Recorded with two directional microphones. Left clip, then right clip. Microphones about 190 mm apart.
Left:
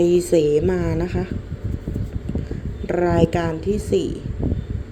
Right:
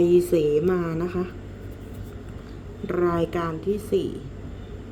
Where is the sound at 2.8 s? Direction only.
10° left (ahead or behind).